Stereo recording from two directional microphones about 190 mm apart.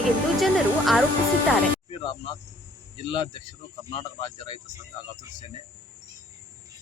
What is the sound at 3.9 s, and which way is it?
Speech, 25° left (ahead or behind).